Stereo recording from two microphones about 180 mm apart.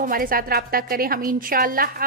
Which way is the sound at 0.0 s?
55° right (ahead or behind).